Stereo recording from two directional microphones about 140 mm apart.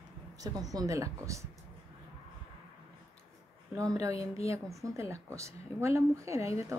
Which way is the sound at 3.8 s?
25° right (ahead or behind).